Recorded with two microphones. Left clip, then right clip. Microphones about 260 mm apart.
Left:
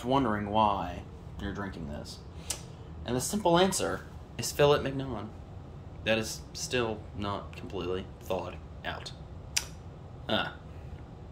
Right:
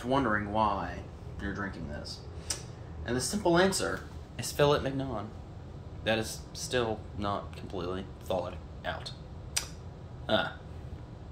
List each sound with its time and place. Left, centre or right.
0.0 s speech: left
3.1 s speech: left
4.4 s speech: centre